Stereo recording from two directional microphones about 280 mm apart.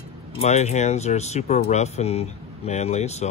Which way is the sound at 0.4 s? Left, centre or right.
Left.